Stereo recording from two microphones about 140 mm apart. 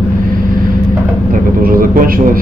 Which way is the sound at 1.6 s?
90° right.